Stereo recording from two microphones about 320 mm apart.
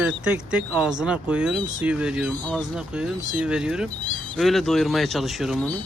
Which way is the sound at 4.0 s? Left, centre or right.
Centre.